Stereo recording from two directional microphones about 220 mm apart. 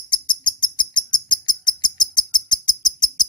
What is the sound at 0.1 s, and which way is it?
Bird, 20° left (ahead or behind).